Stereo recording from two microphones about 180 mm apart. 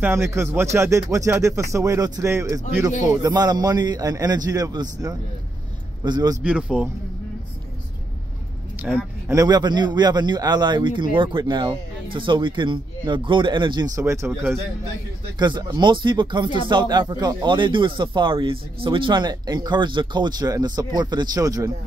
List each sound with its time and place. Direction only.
0.0 s speech: 15° right (ahead or behind)
6.4 s speech: 5° right (ahead or behind)
8.8 s speech: 15° right (ahead or behind)
15.3 s speech: 25° right (ahead or behind)